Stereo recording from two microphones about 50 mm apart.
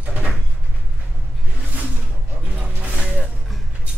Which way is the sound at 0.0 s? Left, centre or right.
Right.